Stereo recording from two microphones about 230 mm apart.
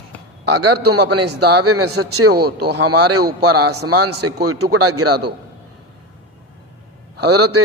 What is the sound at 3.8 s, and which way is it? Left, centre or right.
Speech, right.